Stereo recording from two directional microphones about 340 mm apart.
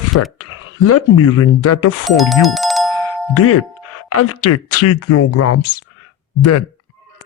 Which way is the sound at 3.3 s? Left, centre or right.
Left.